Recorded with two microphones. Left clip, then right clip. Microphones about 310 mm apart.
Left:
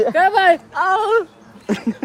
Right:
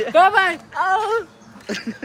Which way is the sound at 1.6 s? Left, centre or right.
Centre.